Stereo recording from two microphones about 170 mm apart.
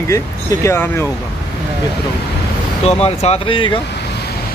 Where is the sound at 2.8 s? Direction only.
35° left (ahead or behind).